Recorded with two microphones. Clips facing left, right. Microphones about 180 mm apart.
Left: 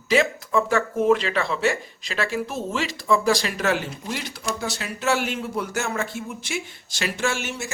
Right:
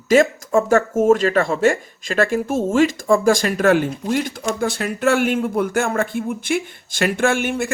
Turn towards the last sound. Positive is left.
turn(degrees=-55)  # may be behind; listen again after turning